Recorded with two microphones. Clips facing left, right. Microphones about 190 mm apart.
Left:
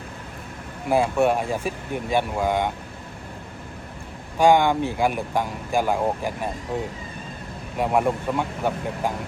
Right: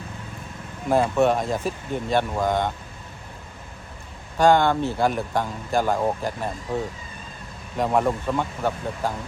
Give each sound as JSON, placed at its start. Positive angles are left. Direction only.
{"t": 0.9, "sound": "speech", "side_deg": 10}
{"t": 4.4, "sound": "speech", "side_deg": 15}
{"t": 7.8, "sound": "speech", "side_deg": 10}